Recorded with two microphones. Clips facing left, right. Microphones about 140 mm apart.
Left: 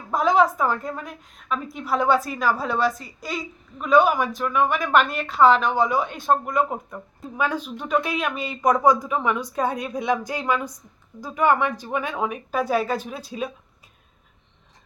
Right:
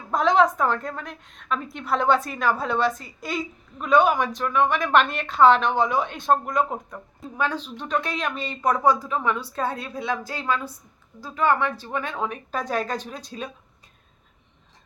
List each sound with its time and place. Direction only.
0.1 s a woman's voice: 5° left (ahead or behind)